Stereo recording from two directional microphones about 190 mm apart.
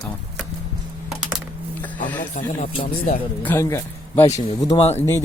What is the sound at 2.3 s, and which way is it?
Speech, 35° left (ahead or behind).